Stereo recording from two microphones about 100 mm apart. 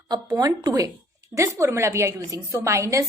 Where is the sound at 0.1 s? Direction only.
40° right (ahead or behind).